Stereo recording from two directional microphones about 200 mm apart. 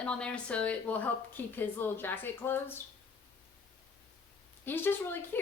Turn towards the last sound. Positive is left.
turn(degrees=10)  # may be behind; listen again after turning